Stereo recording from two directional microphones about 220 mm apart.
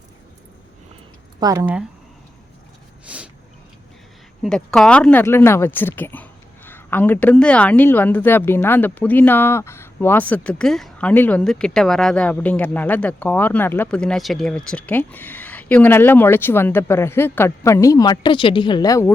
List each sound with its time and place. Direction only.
1.4 s speech: 15° right (ahead or behind)
3.1 s a sound: 5° right (ahead or behind)
4.4 s a woman's voice: centre (ahead or behind)